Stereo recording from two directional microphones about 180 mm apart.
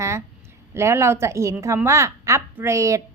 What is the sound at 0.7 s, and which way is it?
A woman's voice, 15° right (ahead or behind).